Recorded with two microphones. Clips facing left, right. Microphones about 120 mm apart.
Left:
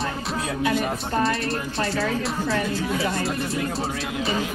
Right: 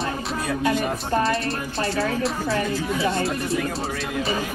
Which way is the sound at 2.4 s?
25° right (ahead or behind).